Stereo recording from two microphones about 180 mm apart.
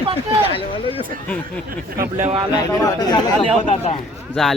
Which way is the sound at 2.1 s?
40° right (ahead or behind).